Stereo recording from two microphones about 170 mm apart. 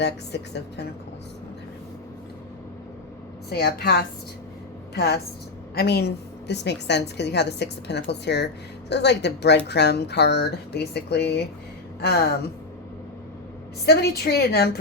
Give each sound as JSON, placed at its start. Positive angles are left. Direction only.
{"t": 0.0, "sound": "a woman's voice", "side_deg": 85}
{"t": 3.5, "sound": "a woman's voice", "side_deg": 70}
{"t": 13.8, "sound": "speech", "side_deg": 70}